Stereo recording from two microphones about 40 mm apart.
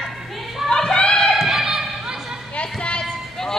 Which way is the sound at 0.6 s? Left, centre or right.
Centre.